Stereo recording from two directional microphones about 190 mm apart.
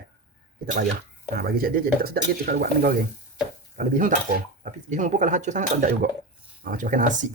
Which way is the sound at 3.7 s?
45° right (ahead or behind).